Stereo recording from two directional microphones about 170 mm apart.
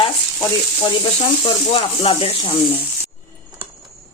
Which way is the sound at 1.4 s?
35° left (ahead or behind).